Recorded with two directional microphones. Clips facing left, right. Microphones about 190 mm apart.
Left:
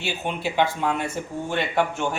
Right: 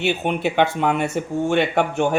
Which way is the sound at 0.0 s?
60° right (ahead or behind).